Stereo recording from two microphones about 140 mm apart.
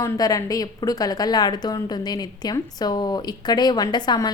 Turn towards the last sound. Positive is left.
turn(degrees=30)  # may be behind; listen again after turning